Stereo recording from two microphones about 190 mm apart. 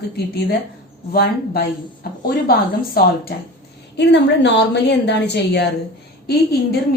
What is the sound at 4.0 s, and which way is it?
A woman's voice, 60° left (ahead or behind).